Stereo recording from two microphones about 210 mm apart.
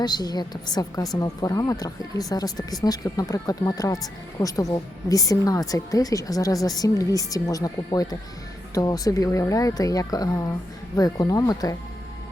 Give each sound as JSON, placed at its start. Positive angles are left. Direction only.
{"t": 0.0, "sound": "a woman's voice", "side_deg": 20}